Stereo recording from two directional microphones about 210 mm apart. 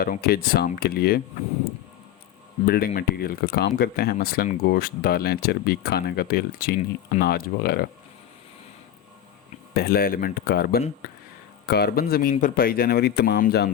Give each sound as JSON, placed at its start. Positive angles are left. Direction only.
{"t": 0.0, "sound": "speech", "side_deg": 45}
{"t": 2.6, "sound": "speech", "side_deg": 45}
{"t": 9.7, "sound": "speech", "side_deg": 45}